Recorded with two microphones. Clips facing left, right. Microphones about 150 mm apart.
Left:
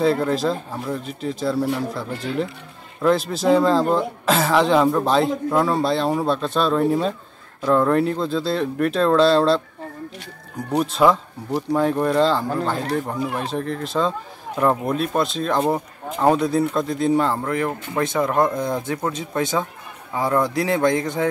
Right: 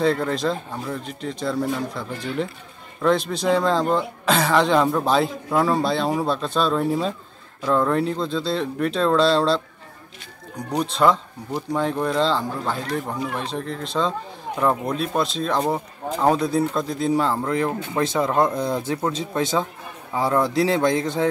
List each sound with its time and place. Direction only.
0.0 s a man's voice: 5° left (ahead or behind)
10.7 s a man's voice: 5° left (ahead or behind)
17.5 s speech: 20° right (ahead or behind)
18.4 s a man's voice: centre (ahead or behind)
19.1 s speech: 25° right (ahead or behind)
20.1 s a man's voice: 5° right (ahead or behind)
20.5 s speech: 25° right (ahead or behind)